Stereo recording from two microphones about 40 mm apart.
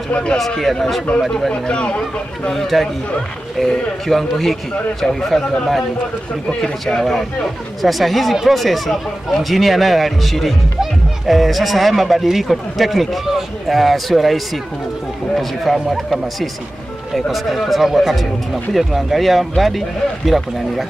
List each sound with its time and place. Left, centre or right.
0.1 s speech: left
0.6 s speech: centre
1.5 s speech: left
2.5 s speech: centre
6.6 s speech: centre
7.8 s speech: centre